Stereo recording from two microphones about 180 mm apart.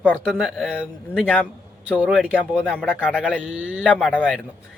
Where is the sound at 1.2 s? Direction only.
5° left (ahead or behind).